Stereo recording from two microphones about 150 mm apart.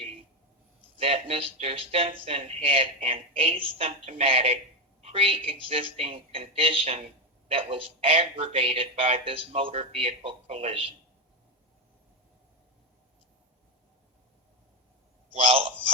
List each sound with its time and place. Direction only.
0.9 s speech: 40° right (ahead or behind)
15.4 s speech: 40° right (ahead or behind)